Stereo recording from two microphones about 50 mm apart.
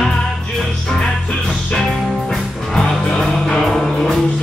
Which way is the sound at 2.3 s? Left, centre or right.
Centre.